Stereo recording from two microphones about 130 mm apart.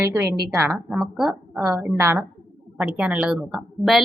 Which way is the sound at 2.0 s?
20° right (ahead or behind).